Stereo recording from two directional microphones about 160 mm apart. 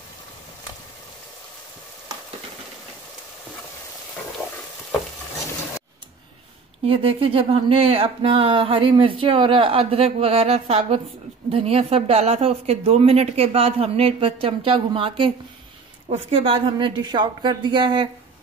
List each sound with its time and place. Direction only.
6.8 s speech: 35° right (ahead or behind)